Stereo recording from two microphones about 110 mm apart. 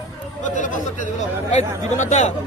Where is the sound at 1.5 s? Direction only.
90° left.